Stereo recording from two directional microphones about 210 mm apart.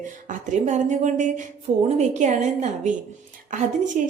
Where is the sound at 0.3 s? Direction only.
35° right (ahead or behind).